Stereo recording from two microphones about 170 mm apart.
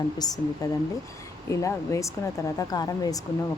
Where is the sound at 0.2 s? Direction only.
20° left (ahead or behind).